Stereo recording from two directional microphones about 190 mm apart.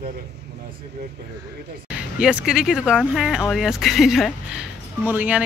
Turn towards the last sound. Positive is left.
turn(degrees=-10)  # may be behind; listen again after turning